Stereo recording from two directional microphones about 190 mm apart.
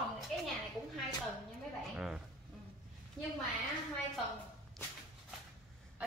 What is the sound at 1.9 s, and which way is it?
Speech, 5° right (ahead or behind).